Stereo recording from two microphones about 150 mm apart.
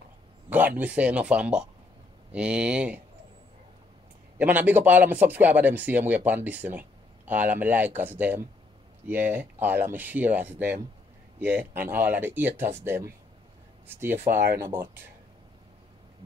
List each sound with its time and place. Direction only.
0.5 s speech: 10° right (ahead or behind)
4.4 s speech: 10° right (ahead or behind)